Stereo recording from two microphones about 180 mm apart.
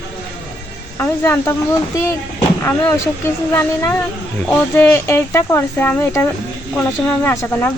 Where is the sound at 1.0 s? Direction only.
15° left (ahead or behind).